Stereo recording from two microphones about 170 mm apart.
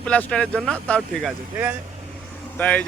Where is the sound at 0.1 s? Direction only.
5° left (ahead or behind).